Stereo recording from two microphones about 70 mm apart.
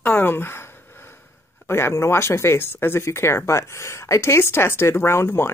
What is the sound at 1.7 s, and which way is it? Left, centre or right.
Speech, left.